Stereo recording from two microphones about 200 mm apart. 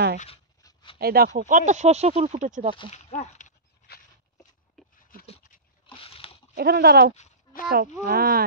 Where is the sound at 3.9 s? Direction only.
55° left (ahead or behind).